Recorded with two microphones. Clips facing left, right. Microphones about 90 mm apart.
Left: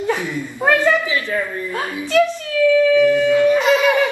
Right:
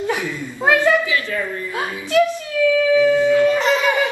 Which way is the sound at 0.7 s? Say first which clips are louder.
Even; 10° right (ahead or behind).